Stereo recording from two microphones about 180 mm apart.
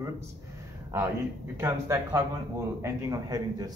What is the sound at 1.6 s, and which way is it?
A man's voice, 15° right (ahead or behind).